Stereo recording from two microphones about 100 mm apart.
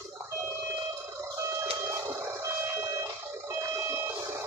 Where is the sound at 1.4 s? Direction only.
30° right (ahead or behind).